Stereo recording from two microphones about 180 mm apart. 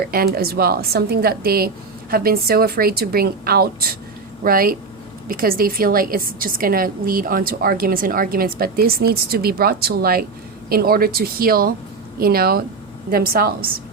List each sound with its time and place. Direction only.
0.1 s a woman's voice: 55° right (ahead or behind)